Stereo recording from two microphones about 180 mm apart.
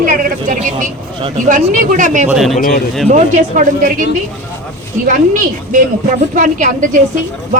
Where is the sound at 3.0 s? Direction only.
45° right (ahead or behind).